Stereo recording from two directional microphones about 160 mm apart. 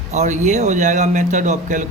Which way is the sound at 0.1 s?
45° right (ahead or behind).